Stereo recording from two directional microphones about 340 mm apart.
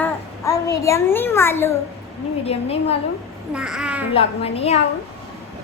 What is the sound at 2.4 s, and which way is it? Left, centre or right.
Speech, centre.